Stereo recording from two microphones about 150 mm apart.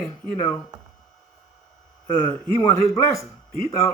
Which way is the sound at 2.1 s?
15° left (ahead or behind).